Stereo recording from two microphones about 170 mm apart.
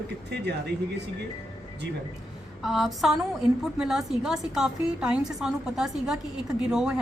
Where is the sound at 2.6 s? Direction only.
Centre (ahead or behind).